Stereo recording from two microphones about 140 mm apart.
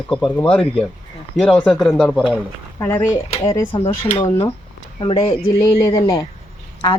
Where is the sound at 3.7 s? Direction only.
50° left (ahead or behind).